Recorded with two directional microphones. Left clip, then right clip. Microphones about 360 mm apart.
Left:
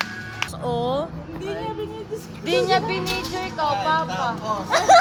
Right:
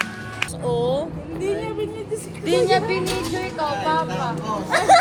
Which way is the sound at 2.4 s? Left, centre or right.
Left.